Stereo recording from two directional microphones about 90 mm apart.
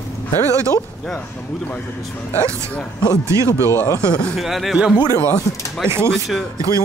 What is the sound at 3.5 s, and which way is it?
Speech, 30° left (ahead or behind).